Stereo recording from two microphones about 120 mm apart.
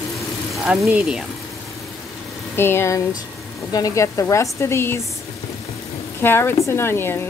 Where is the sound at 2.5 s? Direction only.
20° left (ahead or behind).